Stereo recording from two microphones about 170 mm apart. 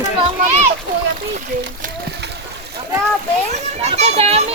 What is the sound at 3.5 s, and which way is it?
Speech, 40° right (ahead or behind).